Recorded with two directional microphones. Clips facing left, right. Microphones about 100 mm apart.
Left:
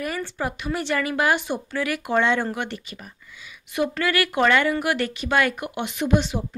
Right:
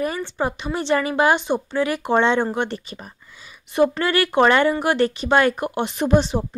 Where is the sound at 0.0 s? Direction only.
25° right (ahead or behind).